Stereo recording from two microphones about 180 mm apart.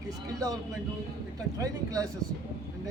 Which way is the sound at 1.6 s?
20° right (ahead or behind).